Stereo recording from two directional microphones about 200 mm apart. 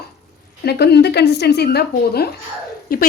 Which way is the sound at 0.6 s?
55° left (ahead or behind).